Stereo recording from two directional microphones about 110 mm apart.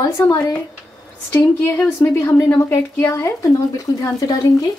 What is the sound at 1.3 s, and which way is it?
A woman's voice, 20° left (ahead or behind).